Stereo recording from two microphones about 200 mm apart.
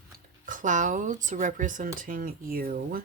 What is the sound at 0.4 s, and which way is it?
Speech, 40° right (ahead or behind).